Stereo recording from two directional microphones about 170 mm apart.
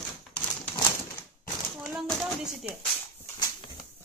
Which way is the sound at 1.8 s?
Centre (ahead or behind).